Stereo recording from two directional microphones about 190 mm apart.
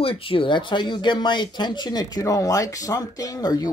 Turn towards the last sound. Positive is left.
turn(degrees=20)  # may be behind; listen again after turning